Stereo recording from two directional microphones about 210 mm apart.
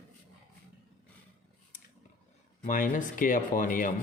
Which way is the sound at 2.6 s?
40° left (ahead or behind).